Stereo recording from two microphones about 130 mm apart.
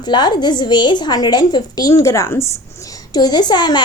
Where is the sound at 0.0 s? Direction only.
35° left (ahead or behind).